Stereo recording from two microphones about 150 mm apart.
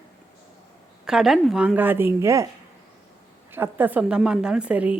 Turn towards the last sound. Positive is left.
turn(degrees=-10)  # may be behind; listen again after turning